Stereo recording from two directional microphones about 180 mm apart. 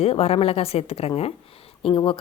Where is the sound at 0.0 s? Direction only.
35° left (ahead or behind).